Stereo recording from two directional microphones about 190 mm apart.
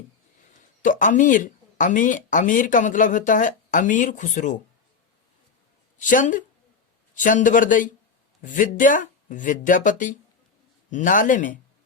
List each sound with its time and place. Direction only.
0.8 s speech: 45° left (ahead or behind)
6.0 s speech: 45° left (ahead or behind)